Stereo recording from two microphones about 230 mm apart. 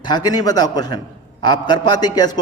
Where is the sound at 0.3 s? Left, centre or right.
Centre.